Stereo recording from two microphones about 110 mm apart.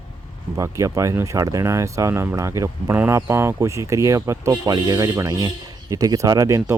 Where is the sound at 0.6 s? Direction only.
30° right (ahead or behind).